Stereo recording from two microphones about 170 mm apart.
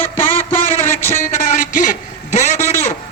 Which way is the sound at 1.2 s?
50° left (ahead or behind).